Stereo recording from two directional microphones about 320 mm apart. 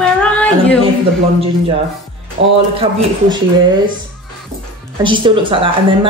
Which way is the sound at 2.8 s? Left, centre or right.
Centre.